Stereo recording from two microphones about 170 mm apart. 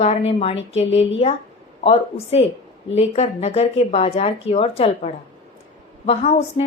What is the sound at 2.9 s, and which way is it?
A woman's voice, 40° left (ahead or behind).